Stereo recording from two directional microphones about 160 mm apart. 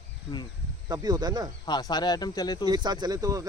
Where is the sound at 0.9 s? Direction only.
25° right (ahead or behind).